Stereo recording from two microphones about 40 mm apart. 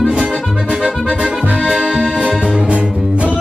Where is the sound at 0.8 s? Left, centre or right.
Centre.